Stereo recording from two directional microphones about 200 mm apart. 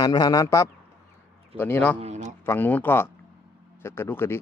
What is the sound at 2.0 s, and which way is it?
Speech, 35° right (ahead or behind).